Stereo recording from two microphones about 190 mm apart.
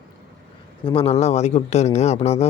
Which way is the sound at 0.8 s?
30° left (ahead or behind).